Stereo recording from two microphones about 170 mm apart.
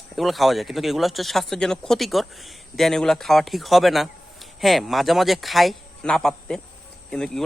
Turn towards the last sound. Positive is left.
turn(degrees=5)  # may be behind; listen again after turning